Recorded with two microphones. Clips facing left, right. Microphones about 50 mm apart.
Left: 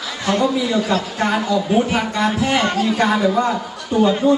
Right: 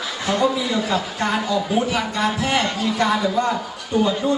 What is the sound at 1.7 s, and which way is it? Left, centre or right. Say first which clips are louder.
Speech: left 5 dB; left.